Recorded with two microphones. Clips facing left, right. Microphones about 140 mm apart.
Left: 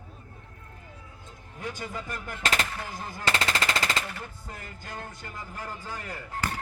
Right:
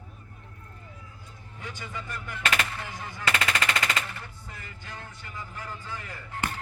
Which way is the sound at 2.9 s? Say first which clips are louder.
Left 1 dB; 40° left (ahead or behind).